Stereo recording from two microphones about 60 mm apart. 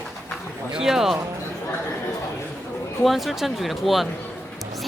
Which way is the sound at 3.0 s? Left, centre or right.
Centre.